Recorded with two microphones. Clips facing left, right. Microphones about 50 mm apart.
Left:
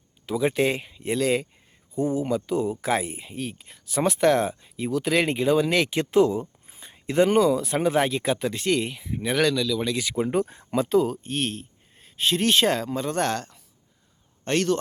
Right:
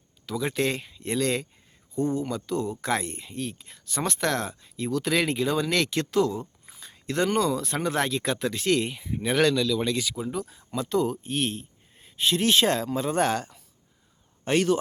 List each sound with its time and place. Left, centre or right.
0.3 s speech: centre
10.2 s speech: left
10.9 s a man's voice: centre